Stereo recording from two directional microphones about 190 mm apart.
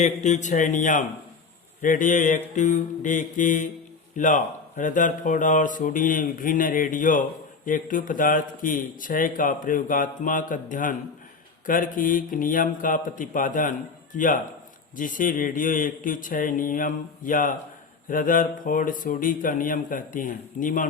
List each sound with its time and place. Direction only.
0.0 s speech: 40° left (ahead or behind)